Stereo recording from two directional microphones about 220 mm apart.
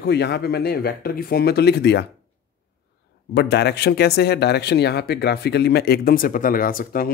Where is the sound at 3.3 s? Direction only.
50° left (ahead or behind).